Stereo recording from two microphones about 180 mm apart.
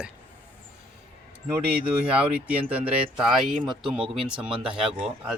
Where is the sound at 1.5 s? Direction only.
5° right (ahead or behind).